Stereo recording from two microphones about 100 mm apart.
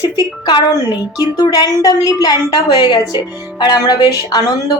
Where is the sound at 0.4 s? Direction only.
45° left (ahead or behind).